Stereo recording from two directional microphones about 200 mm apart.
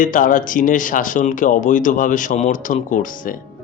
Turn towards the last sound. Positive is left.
turn(degrees=40)  # may be behind; listen again after turning